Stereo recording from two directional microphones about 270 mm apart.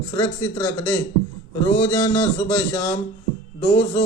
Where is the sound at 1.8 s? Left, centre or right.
Centre.